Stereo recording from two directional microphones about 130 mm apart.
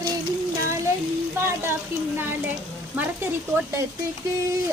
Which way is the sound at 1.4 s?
20° right (ahead or behind).